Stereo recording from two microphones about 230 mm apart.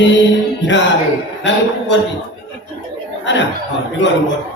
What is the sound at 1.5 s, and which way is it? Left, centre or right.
Music, left.